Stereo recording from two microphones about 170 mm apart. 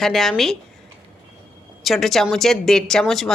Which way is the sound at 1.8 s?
Centre (ahead or behind).